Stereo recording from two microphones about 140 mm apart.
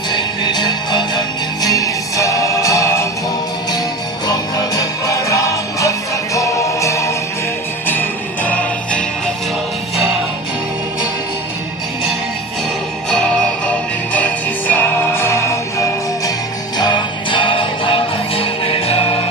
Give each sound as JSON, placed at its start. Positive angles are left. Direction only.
{"t": 0.1, "sound": "music", "side_deg": 30}
{"t": 4.3, "sound": "music", "side_deg": 25}
{"t": 8.4, "sound": "music", "side_deg": 10}
{"t": 13.1, "sound": "music", "side_deg": 5}
{"t": 16.7, "sound": "music", "side_deg": 35}